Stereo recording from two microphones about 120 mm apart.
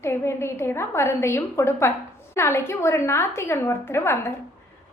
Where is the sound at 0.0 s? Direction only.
20° left (ahead or behind).